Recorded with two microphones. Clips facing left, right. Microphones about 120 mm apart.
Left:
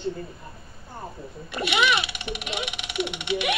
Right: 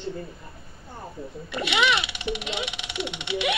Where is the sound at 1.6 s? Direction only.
25° right (ahead or behind).